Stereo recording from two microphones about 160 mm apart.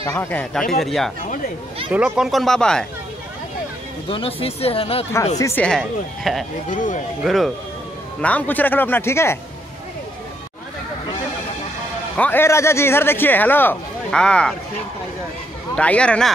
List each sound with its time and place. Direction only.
0.1 s speech: 10° left (ahead or behind)
4.1 s speech: 35° left (ahead or behind)
5.4 s speech: 10° left (ahead or behind)
6.7 s speech: 55° left (ahead or behind)
7.2 s speech: centre (ahead or behind); by 9.4 s 15° left (ahead or behind)
12.2 s speech: 15° left (ahead or behind)
15.7 s speech: 5° left (ahead or behind)